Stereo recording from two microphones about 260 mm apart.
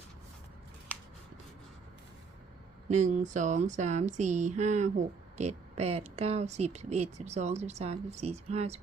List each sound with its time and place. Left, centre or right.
2.9 s speech: right